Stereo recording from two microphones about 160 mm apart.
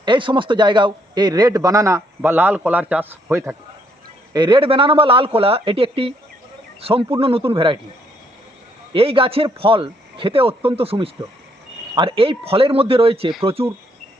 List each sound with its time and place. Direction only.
0.0 s a man's voice: 30° right (ahead or behind); by 3.5 s 10° right (ahead or behind)
4.4 s speech: 30° right (ahead or behind)
8.9 s speech: 35° right (ahead or behind)